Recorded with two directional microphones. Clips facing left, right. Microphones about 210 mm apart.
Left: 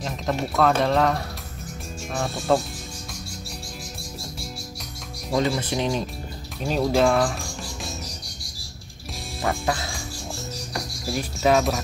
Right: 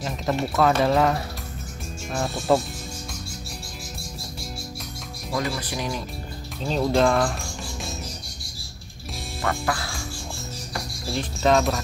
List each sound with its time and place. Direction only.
0.0 s speech: centre (ahead or behind)
5.3 s speech: 25° left (ahead or behind)
6.6 s speech: 5° left (ahead or behind)
9.4 s music: 20° left (ahead or behind)
11.1 s speech: 5° left (ahead or behind)